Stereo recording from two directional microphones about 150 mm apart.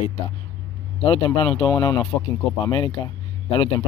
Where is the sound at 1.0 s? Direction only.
40° left (ahead or behind).